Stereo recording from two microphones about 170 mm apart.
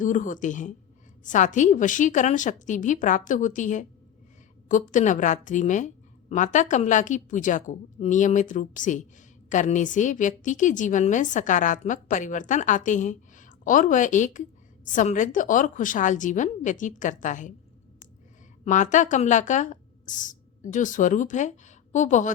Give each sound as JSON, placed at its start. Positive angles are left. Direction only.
{"t": 0.0, "sound": "a woman's voice", "side_deg": 50}
{"t": 18.6, "sound": "speech", "side_deg": 45}